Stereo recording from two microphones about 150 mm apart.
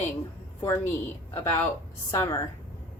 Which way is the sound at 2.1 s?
15° left (ahead or behind).